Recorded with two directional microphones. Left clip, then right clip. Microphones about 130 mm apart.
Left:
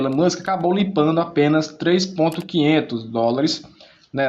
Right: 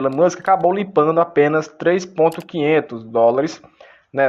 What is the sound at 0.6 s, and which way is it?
Speech, 45° right (ahead or behind).